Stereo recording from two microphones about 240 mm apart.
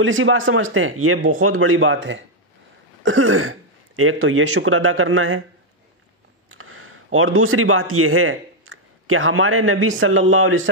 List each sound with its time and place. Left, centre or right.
0.0 s speech: right
6.6 s speech: right